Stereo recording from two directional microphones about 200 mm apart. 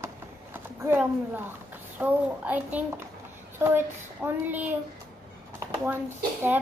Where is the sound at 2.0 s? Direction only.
10° right (ahead or behind).